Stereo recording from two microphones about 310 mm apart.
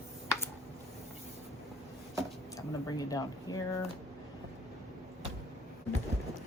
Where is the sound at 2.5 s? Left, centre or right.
Centre.